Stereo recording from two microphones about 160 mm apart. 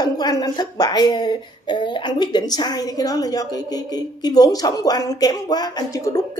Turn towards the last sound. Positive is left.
turn(degrees=20)  # may be behind; listen again after turning